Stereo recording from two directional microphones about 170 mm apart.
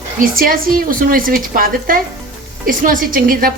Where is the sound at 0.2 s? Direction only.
55° right (ahead or behind).